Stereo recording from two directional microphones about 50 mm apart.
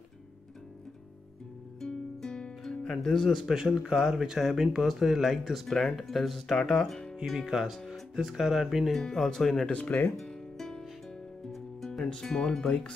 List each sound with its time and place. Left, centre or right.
1.8 s music: centre
3.0 s speech: centre
7.3 s speech: centre
8.9 s speech: centre
9.7 s speech: left
10.2 s music: centre